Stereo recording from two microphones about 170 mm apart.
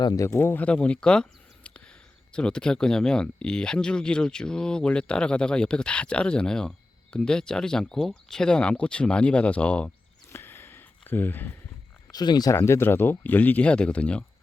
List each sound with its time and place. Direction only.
0.0 s speech: 20° left (ahead or behind)
12.1 s speech: 25° left (ahead or behind); by 14.3 s 5° left (ahead or behind)